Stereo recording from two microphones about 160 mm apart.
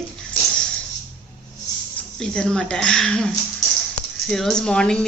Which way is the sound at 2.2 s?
5° left (ahead or behind).